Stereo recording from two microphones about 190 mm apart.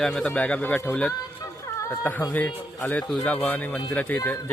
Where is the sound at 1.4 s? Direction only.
15° left (ahead or behind).